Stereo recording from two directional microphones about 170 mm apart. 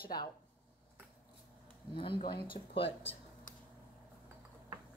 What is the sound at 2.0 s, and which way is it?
Speech, 30° left (ahead or behind).